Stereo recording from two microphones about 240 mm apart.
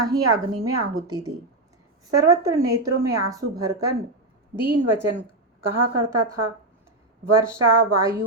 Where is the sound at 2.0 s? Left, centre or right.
Centre.